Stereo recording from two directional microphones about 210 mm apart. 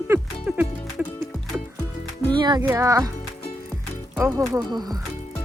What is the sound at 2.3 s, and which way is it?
Speech, 20° right (ahead or behind).